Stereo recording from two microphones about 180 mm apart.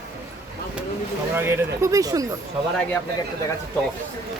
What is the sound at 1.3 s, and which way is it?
Speech, 15° right (ahead or behind).